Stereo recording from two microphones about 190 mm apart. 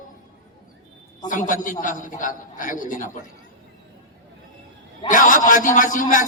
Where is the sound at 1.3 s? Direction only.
45° left (ahead or behind).